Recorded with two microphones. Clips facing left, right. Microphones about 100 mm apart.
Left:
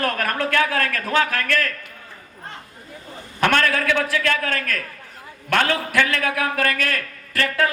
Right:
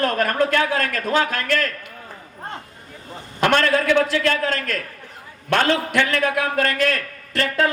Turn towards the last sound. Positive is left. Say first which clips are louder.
# right 1 dB
turn(degrees=-25)  # may be behind; listen again after turning